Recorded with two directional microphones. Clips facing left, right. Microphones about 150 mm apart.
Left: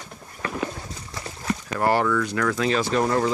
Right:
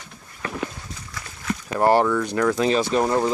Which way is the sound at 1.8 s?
25° right (ahead or behind).